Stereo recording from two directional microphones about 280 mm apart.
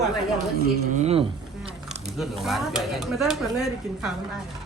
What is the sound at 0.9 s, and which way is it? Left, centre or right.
Speech, right.